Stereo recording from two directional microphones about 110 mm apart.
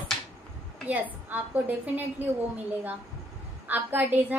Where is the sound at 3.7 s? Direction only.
15° right (ahead or behind).